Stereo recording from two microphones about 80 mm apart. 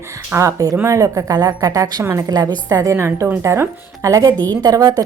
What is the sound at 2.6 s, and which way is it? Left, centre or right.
Speech, right.